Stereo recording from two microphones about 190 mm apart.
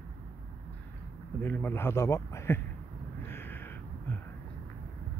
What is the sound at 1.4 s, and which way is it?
Speech, 10° left (ahead or behind).